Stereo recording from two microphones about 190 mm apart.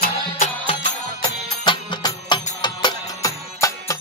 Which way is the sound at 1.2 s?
25° left (ahead or behind).